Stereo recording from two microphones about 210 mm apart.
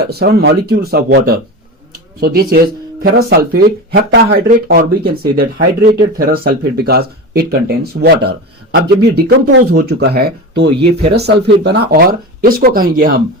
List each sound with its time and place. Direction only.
0.0 s speech: 50° right (ahead or behind)
9.2 s speech: 90° right
9.7 s speech: 50° right (ahead or behind)